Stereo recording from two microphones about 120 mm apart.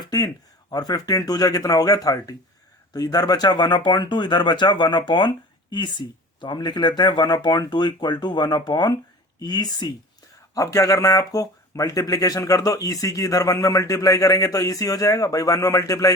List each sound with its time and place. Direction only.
0.7 s speech: 30° left (ahead or behind)